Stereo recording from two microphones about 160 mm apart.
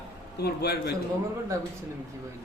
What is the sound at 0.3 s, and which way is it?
Speech, 85° left.